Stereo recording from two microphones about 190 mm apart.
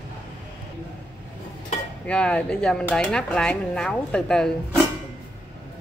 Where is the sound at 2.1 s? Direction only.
5° left (ahead or behind).